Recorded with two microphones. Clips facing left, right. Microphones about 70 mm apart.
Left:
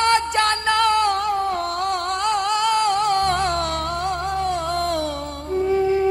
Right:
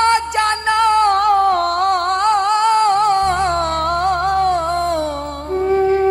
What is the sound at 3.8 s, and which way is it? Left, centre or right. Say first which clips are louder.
Music: right 7 dB; right.